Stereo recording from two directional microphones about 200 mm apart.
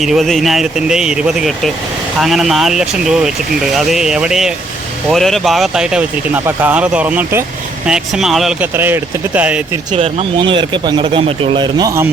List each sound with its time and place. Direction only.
0.0 s speech: centre (ahead or behind)
9.9 s speech: 30° right (ahead or behind)